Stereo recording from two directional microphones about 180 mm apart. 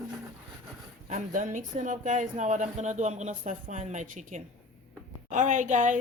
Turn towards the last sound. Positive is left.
turn(degrees=-45)  # may be behind; listen again after turning